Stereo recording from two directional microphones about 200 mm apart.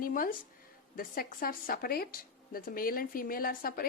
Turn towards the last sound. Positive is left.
turn(degrees=45)  # may be behind; listen again after turning